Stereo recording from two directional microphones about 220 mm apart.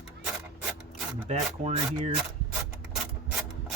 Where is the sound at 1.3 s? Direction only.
30° right (ahead or behind).